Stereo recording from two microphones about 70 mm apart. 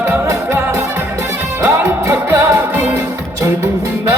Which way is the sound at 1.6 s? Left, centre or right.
Right.